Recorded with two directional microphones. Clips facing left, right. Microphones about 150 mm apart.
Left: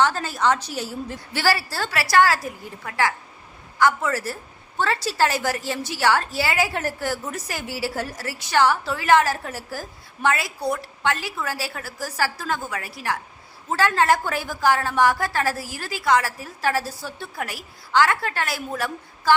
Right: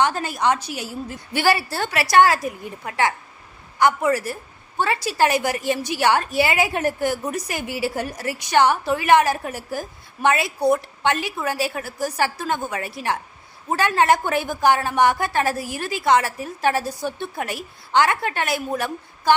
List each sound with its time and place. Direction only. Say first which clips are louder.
0.0 s a woman's voice: right 1 dB; 15° right (ahead or behind)